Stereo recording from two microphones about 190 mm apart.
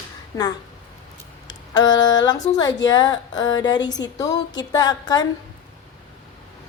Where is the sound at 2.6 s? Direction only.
20° left (ahead or behind).